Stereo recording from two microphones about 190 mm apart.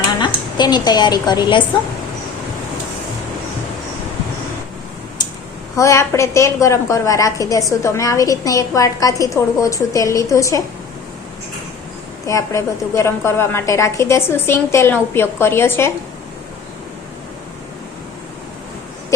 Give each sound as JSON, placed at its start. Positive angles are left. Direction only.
{"t": 0.2, "sound": "a woman's voice", "side_deg": 20}
{"t": 5.7, "sound": "a woman's voice", "side_deg": 15}
{"t": 12.2, "sound": "a woman's voice", "side_deg": 15}